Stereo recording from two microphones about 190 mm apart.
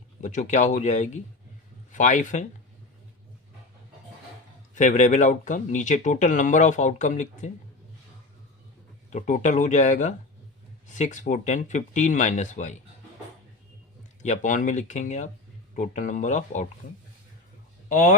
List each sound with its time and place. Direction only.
0.2 s speech: 40° left (ahead or behind)
4.7 s speech: 40° left (ahead or behind)
9.0 s speech: 40° left (ahead or behind)
14.2 s speech: 40° left (ahead or behind)
17.8 s speech: 45° left (ahead or behind)